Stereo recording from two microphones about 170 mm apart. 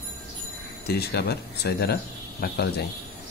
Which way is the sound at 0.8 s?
70° left (ahead or behind).